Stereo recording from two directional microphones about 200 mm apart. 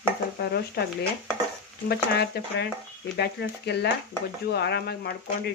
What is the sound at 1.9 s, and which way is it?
Speech, 55° left (ahead or behind).